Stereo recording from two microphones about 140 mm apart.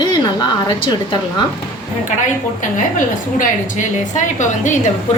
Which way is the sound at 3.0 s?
65° left (ahead or behind).